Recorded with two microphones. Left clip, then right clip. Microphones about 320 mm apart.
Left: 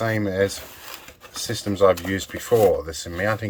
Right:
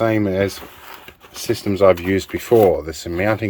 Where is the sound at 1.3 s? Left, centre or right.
Right.